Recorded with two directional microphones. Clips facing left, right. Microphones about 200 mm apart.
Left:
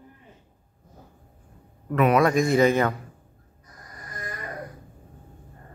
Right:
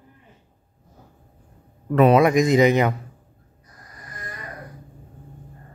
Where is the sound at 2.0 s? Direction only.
30° right (ahead or behind).